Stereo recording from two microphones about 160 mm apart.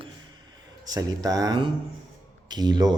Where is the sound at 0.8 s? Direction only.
25° right (ahead or behind).